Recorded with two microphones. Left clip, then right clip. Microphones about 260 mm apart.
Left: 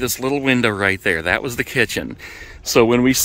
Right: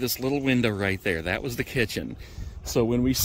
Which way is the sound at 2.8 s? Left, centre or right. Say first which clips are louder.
Left 10 dB; left.